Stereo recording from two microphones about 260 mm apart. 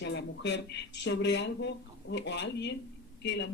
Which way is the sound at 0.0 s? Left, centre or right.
Left.